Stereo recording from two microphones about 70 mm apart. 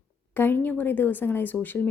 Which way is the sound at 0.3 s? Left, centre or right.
Left.